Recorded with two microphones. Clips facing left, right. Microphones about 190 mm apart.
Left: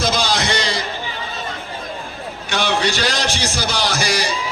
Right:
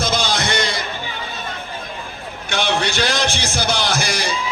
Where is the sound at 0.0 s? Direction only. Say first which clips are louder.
Left 1 dB; 55° right (ahead or behind).